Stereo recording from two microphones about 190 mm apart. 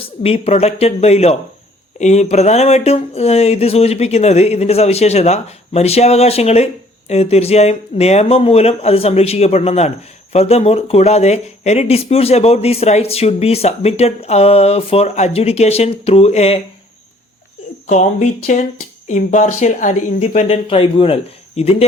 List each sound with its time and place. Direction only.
0.0 s speech: 30° left (ahead or behind)
17.8 s speech: 40° left (ahead or behind)